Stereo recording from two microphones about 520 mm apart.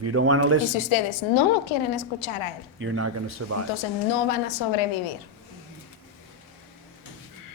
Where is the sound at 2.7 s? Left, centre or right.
Right.